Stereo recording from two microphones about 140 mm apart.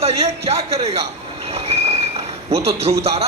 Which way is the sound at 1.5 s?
50° right (ahead or behind).